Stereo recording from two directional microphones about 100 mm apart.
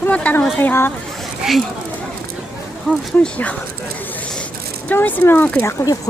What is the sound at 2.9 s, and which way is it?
Speech, 10° left (ahead or behind).